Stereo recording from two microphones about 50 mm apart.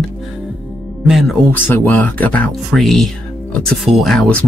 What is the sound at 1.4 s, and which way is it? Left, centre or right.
Speech, left.